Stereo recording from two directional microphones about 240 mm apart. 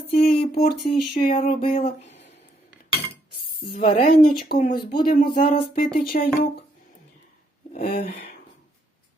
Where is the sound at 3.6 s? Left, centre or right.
Left.